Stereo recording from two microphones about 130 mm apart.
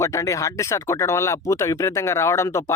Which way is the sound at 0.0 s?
25° left (ahead or behind).